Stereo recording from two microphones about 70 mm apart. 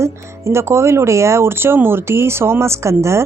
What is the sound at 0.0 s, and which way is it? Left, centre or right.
Speech, right.